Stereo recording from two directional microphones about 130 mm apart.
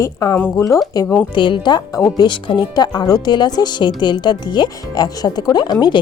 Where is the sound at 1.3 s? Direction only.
35° left (ahead or behind).